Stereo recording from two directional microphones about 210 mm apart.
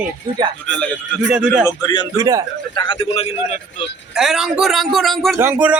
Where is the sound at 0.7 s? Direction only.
5° left (ahead or behind).